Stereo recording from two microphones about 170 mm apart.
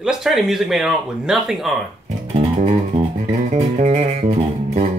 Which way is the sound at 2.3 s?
40° right (ahead or behind).